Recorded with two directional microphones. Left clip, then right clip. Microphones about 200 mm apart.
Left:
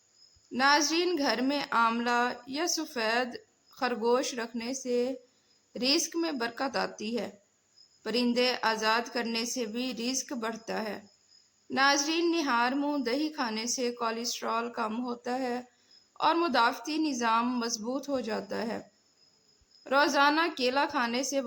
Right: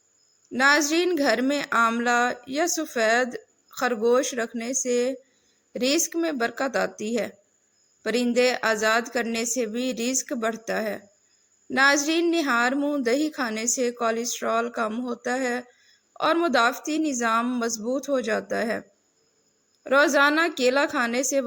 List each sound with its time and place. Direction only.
0.5 s a woman's voice: 20° right (ahead or behind)